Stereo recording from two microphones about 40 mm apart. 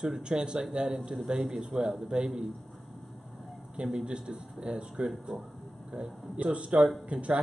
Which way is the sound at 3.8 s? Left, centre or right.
Right.